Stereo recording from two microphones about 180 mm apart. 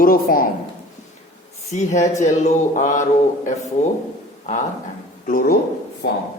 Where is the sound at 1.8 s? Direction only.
40° left (ahead or behind).